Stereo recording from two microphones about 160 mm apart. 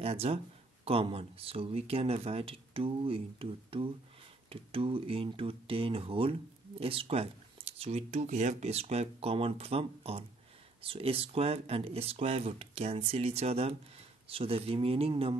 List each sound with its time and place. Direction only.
0.0 s speech: 40° right (ahead or behind)